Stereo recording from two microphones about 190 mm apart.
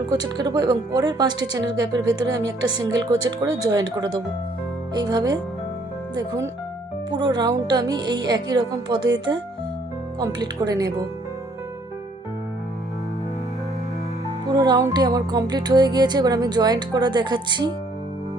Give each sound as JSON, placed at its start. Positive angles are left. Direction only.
{"t": 0.1, "sound": "music", "side_deg": -20}
{"t": 6.1, "sound": "speech", "side_deg": -20}
{"t": 7.1, "sound": "music", "side_deg": -20}
{"t": 14.4, "sound": "music", "side_deg": -20}